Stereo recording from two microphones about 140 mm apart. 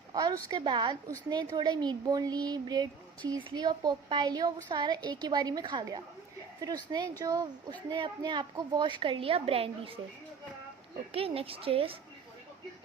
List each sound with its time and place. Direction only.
0.1 s a woman's voice: 30° right (ahead or behind)
11.1 s a woman's voice: 45° right (ahead or behind)